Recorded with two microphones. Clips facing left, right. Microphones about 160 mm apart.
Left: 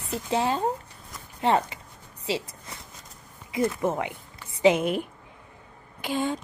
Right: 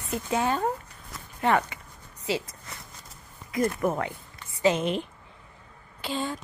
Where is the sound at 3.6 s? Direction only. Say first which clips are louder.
Left 1 dB; 20° left (ahead or behind).